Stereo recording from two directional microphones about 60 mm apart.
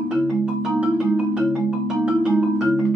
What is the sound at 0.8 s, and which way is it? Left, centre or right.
Marimba, centre.